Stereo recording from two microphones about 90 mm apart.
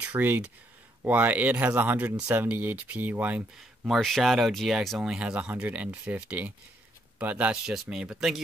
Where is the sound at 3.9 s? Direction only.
Centre (ahead or behind).